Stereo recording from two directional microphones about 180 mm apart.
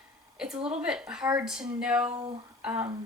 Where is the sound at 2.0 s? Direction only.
30° right (ahead or behind).